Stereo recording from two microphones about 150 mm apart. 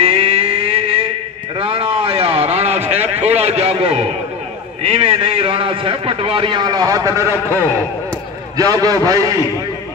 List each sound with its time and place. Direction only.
0.0 s a sound: 40° right (ahead or behind)
4.8 s a man's voice: 40° right (ahead or behind); by 7.3 s 20° right (ahead or behind)
8.5 s a man's voice: 25° right (ahead or behind)